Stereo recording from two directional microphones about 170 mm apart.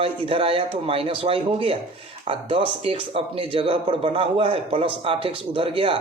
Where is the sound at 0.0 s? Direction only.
35° right (ahead or behind).